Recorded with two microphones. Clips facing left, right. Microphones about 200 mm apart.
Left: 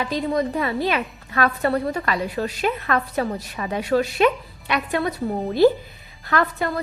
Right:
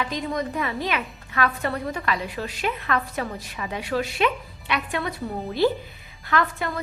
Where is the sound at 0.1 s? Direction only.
35° left (ahead or behind).